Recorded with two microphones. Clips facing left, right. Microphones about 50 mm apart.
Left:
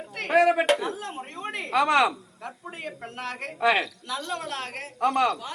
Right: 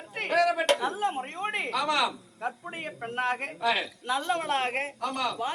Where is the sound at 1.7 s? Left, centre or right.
Left.